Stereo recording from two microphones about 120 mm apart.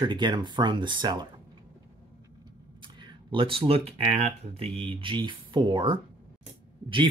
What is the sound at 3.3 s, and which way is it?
Speech, 50° right (ahead or behind).